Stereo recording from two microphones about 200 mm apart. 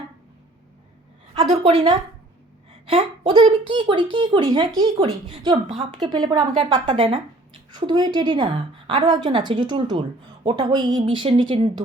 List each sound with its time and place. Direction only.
1.5 s speech: 30° right (ahead or behind)